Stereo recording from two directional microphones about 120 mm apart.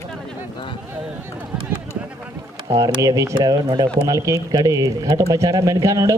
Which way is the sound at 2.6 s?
30° right (ahead or behind).